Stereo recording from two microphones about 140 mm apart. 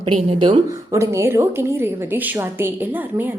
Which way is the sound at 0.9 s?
20° right (ahead or behind).